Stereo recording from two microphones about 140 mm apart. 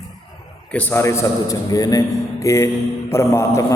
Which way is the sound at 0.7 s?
10° left (ahead or behind).